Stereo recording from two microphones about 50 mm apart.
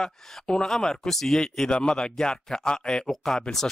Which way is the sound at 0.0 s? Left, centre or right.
Centre.